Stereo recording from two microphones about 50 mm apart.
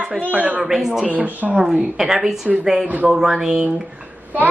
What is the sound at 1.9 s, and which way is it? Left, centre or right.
Speech, centre.